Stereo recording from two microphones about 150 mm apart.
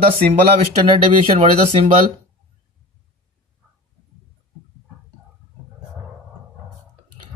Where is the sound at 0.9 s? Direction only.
40° right (ahead or behind).